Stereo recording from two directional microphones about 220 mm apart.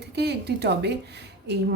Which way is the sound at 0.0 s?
50° right (ahead or behind).